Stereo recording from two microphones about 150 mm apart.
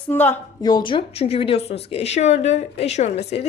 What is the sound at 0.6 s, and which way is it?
Speech, 25° left (ahead or behind).